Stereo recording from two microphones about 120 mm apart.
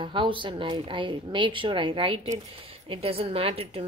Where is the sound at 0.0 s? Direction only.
45° right (ahead or behind).